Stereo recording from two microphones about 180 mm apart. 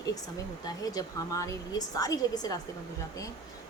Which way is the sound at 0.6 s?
20° left (ahead or behind).